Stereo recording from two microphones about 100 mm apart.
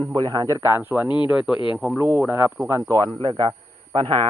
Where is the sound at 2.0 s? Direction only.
15° right (ahead or behind).